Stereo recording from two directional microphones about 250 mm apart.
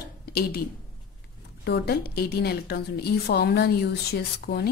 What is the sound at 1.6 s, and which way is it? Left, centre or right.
A woman's voice, left.